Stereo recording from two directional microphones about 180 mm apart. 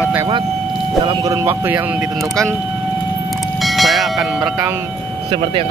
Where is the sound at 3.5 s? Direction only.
Centre (ahead or behind).